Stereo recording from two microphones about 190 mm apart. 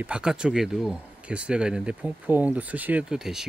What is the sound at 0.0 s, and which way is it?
Speech, 5° right (ahead or behind).